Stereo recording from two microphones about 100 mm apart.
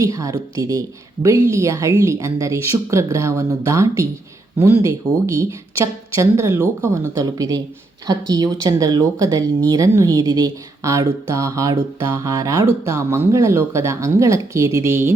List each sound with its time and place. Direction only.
0.0 s a woman's voice: 35° right (ahead or behind)